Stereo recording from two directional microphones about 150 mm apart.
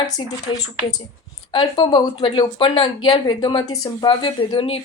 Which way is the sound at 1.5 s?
30° left (ahead or behind).